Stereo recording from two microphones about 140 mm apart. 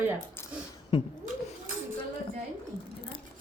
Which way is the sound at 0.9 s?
35° left (ahead or behind).